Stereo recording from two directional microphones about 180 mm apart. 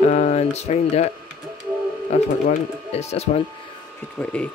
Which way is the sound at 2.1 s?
35° left (ahead or behind).